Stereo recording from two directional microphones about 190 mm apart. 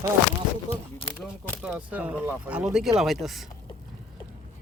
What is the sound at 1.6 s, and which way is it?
Speech, 5° right (ahead or behind).